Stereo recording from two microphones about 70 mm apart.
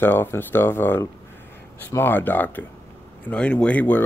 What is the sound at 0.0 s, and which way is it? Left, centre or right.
Speech, left.